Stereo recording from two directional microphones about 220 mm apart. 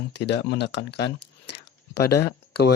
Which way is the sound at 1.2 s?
90° left.